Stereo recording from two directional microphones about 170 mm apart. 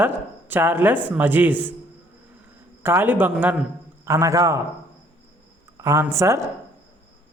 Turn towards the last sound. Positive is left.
turn(degrees=-15)  # may be behind; listen again after turning